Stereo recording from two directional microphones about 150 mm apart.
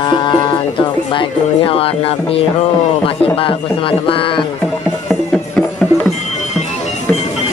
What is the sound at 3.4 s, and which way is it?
Speech, 35° left (ahead or behind).